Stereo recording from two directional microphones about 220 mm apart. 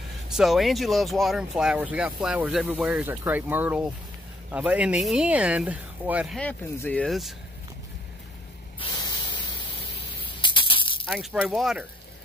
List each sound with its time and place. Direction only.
0.3 s speech: centre (ahead or behind)
8.7 s spray: 20° left (ahead or behind)
10.2 s a sound: 20° left (ahead or behind)
11.1 s speech: 5° right (ahead or behind)